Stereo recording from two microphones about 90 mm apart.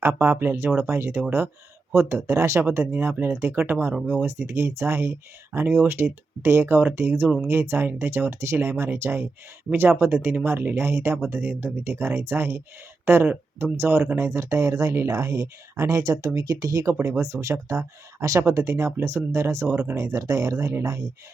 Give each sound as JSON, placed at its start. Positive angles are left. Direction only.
{"t": 0.0, "sound": "speech", "side_deg": -25}
{"t": 4.3, "sound": "speech", "side_deg": -30}